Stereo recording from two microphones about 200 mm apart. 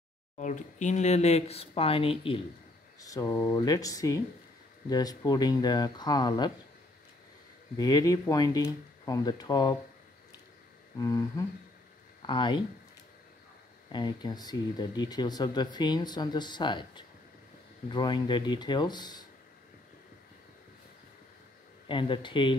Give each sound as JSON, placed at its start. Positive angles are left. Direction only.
{"t": 0.4, "sound": "speech", "side_deg": 40}
{"t": 3.0, "sound": "speech", "side_deg": 15}
{"t": 7.7, "sound": "speech", "side_deg": 20}
{"t": 11.0, "sound": "speech", "side_deg": 20}
{"t": 13.9, "sound": "speech", "side_deg": 20}
{"t": 21.8, "sound": "speech", "side_deg": 25}